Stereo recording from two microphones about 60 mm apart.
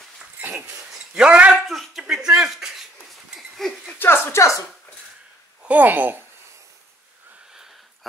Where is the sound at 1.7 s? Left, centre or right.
Centre.